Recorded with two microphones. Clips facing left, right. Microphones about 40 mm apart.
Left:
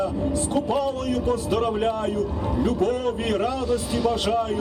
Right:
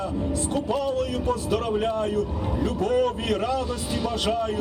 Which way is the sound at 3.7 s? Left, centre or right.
Right.